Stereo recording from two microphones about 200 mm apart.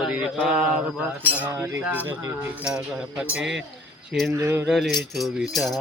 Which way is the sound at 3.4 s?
65° right (ahead or behind).